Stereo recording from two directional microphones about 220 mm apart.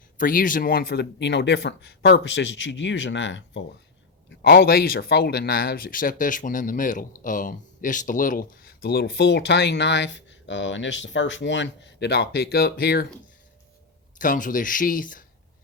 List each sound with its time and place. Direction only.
0.2 s speech: 40° left (ahead or behind); by 3.7 s 55° left (ahead or behind)
4.3 s speech: 45° left (ahead or behind)
14.2 s speech: 35° left (ahead or behind)